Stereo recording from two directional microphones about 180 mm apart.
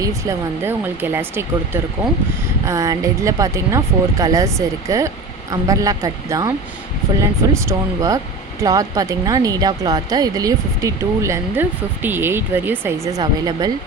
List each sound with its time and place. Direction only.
0.0 s speech: 15° right (ahead or behind)